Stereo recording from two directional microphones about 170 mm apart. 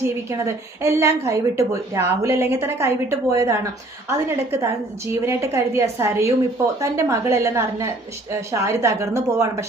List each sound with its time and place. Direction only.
0.0 s speech: 15° right (ahead or behind)